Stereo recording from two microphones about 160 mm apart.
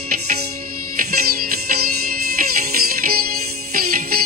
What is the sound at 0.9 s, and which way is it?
Music, 65° right (ahead or behind).